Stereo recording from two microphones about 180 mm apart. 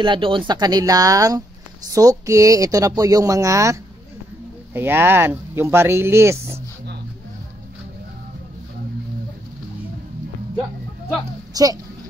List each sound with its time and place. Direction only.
0.0 s speech: 25° right (ahead or behind)
11.5 s speech: 20° right (ahead or behind)